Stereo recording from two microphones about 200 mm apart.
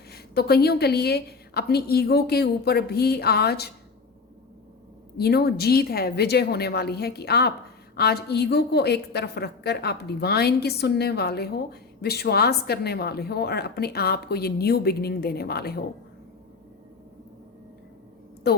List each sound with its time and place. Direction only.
0.1 s a woman's voice: 50° left (ahead or behind)
5.1 s a woman's voice: 50° left (ahead or behind)
18.5 s a woman's voice: 55° left (ahead or behind)